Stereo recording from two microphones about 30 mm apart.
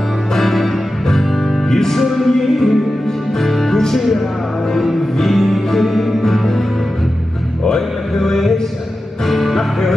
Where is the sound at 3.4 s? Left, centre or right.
Centre.